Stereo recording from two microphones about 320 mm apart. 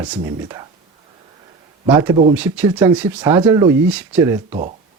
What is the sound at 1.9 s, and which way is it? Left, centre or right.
Speech, centre.